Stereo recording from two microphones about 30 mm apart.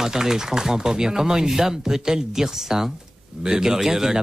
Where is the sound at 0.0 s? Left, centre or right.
Centre.